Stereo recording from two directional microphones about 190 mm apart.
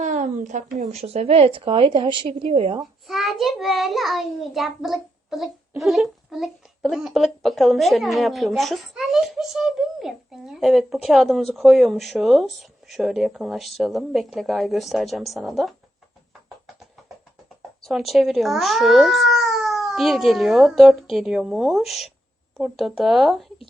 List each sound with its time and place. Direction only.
0.0 s a sound: 40° right (ahead or behind)
0.9 s a woman's voice: 35° right (ahead or behind)
2.8 s speech: centre (ahead or behind)
17.8 s speech: centre (ahead or behind)